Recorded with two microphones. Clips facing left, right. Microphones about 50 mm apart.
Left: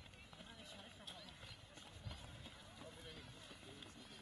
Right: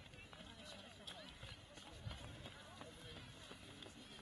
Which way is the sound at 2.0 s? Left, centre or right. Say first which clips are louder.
Right 1 dB; centre.